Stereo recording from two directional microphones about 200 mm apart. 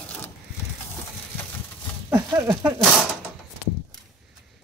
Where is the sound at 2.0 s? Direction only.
20° right (ahead or behind).